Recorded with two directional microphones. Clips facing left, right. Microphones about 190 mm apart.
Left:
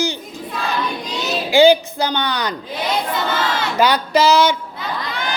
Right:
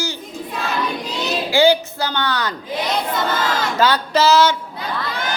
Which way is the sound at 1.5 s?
15° left (ahead or behind).